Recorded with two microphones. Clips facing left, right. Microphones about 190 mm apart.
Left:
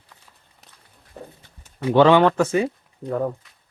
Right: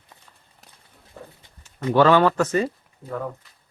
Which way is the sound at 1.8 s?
15° left (ahead or behind).